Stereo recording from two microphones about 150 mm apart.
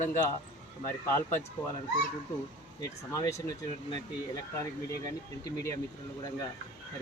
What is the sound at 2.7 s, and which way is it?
Speech, 20° left (ahead or behind).